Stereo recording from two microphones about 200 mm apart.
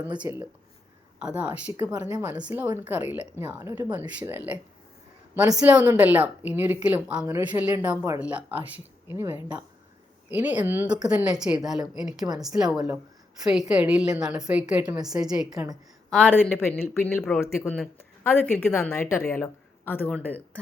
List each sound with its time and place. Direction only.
0.2 s a woman's voice: 10° right (ahead or behind)
1.7 s a woman's voice: 20° right (ahead or behind)
16.0 s speech: 5° left (ahead or behind)